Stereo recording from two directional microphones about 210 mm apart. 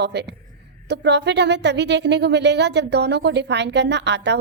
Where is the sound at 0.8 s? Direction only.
55° right (ahead or behind).